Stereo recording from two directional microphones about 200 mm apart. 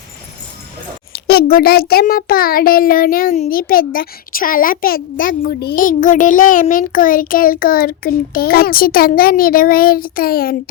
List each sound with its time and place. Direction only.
1.1 s a child's voice: 50° left (ahead or behind)